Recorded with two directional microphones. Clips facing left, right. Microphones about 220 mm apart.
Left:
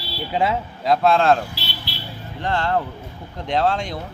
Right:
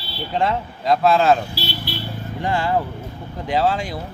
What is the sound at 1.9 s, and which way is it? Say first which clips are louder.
Vehicle: right 7 dB; 50° right (ahead or behind).